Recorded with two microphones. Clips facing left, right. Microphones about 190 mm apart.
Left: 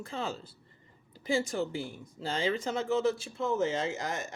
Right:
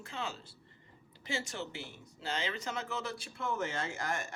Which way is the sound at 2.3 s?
35° left (ahead or behind).